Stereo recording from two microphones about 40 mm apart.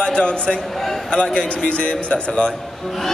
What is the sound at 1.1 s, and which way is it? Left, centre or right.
A man's voice, left.